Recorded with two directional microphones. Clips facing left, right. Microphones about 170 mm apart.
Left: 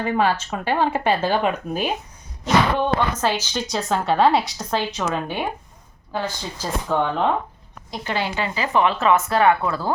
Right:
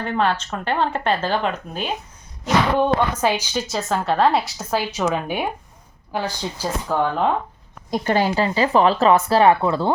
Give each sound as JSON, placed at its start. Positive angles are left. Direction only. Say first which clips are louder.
{"t": 0.0, "sound": "speech", "louder": "left 1 dB", "side_deg": 5}
{"t": 2.7, "sound": "a woman's voice", "louder": "right 3 dB", "side_deg": -10}
{"t": 7.9, "sound": "speech", "louder": "right 6 dB", "side_deg": -45}